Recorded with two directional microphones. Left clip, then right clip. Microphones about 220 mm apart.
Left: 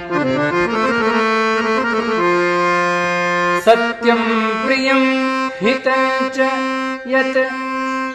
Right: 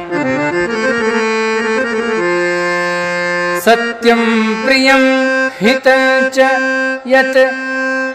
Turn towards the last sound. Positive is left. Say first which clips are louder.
# right 6 dB
turn(degrees=-55)  # may be behind; listen again after turning